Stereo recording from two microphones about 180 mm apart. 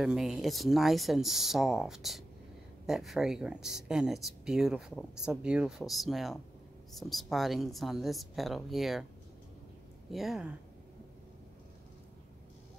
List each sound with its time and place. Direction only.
0.0 s speech: centre (ahead or behind)
10.1 s speech: centre (ahead or behind)